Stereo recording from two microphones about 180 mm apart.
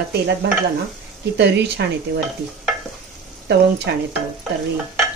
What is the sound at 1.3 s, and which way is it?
Speech, 70° right (ahead or behind).